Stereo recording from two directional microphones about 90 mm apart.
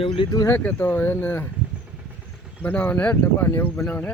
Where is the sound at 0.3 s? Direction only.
30° left (ahead or behind).